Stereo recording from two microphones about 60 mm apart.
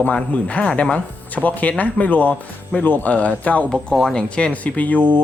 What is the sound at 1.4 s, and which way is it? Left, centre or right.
Speech, left.